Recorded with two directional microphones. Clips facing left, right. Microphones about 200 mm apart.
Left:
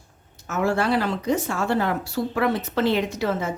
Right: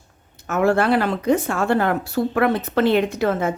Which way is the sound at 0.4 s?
55° right (ahead or behind).